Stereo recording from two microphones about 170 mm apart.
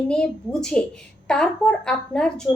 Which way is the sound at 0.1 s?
5° left (ahead or behind).